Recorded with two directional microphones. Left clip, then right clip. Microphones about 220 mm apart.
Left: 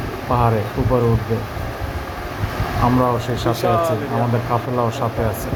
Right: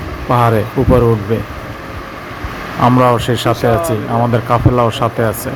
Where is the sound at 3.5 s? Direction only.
Centre (ahead or behind).